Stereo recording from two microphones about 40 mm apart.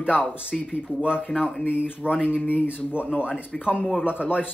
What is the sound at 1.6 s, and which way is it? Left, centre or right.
Speech, left.